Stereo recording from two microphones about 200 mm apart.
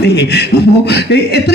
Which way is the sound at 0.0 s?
55° left (ahead or behind).